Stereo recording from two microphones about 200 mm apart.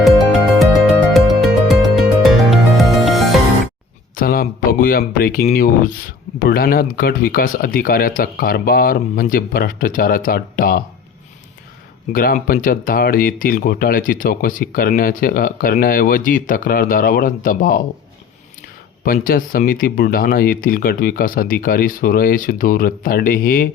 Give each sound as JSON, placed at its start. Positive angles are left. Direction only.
{"t": 0.0, "sound": "music", "side_deg": 0}
{"t": 4.1, "sound": "a sound", "side_deg": 45}
{"t": 5.5, "sound": "speech", "side_deg": 45}
{"t": 12.1, "sound": "speech", "side_deg": 45}
{"t": 19.0, "sound": "speech", "side_deg": 45}